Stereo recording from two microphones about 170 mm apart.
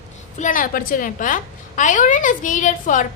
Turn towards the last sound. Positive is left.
turn(degrees=50)  # may be behind; listen again after turning